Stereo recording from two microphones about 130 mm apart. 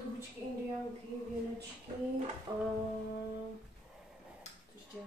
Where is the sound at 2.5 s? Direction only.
30° right (ahead or behind).